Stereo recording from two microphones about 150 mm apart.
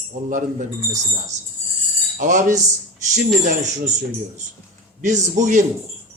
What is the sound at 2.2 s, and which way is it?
Music, 55° right (ahead or behind).